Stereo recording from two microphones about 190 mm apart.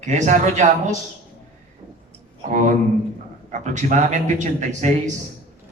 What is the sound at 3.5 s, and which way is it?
A man's voice, 40° right (ahead or behind).